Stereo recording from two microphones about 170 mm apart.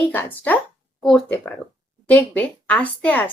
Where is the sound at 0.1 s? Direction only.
10° left (ahead or behind).